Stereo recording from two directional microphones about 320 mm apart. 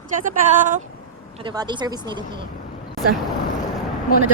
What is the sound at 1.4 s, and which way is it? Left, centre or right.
Speech, centre.